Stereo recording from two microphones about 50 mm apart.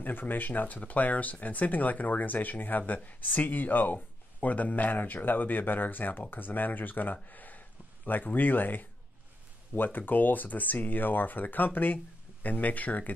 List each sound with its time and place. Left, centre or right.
0.0 s speech: left